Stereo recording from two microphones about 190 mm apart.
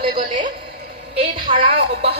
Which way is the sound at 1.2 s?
30° right (ahead or behind).